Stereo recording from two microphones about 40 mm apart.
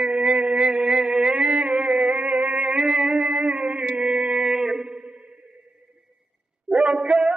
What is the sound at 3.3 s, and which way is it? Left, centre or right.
Music, right.